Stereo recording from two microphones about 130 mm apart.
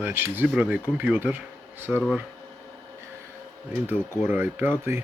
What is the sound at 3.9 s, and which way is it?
Speech, 15° right (ahead or behind).